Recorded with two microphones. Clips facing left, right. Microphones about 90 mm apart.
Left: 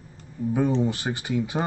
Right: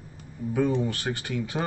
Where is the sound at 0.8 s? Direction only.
20° left (ahead or behind).